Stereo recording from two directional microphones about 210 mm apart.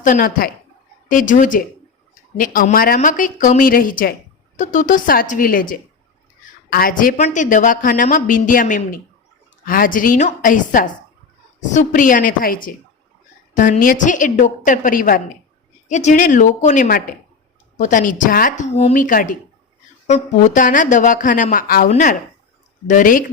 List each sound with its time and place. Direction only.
0.0 s a woman's voice: 40° left (ahead or behind)